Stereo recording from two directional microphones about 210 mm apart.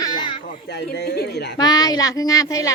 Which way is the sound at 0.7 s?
50° left (ahead or behind).